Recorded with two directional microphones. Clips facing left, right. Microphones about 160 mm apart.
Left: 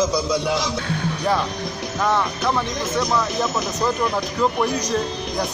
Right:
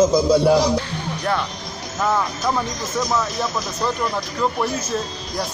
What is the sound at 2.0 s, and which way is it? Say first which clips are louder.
Speech: even; 10° right (ahead or behind).